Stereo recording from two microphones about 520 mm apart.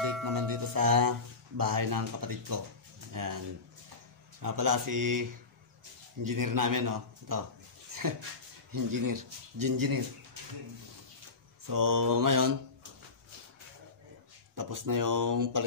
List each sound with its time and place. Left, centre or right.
0.0 s music: right
1.6 s speech: right
8.7 s speech: right
11.6 s speech: right
14.5 s speech: right